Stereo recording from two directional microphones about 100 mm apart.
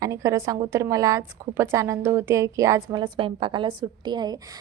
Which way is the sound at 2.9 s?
50° right (ahead or behind).